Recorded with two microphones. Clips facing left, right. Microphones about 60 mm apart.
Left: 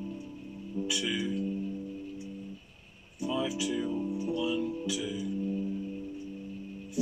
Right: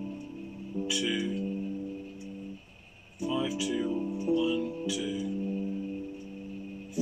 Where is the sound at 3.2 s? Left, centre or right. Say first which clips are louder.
Right 1 dB; centre.